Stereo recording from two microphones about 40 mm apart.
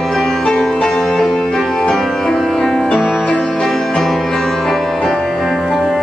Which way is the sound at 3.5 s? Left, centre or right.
Centre.